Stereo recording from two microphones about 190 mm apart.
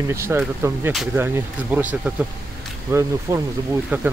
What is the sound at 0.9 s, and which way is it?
Speech, centre (ahead or behind).